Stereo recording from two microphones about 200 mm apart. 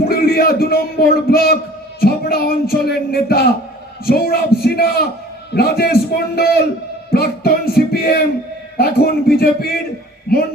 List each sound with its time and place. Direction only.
0.1 s a man's voice: 50° left (ahead or behind)